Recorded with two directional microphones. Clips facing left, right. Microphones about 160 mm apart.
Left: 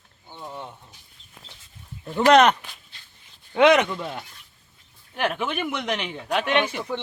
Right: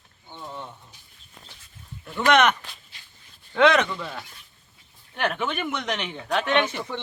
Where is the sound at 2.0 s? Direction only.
35° left (ahead or behind).